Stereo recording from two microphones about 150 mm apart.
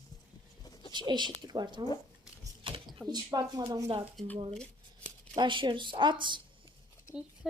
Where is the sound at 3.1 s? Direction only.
25° right (ahead or behind).